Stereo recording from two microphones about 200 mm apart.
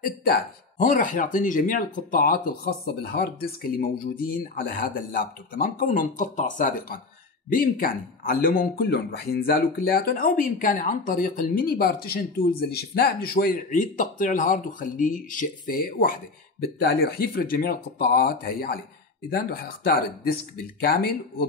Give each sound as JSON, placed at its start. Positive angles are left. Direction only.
{"t": 0.2, "sound": "speech", "side_deg": 45}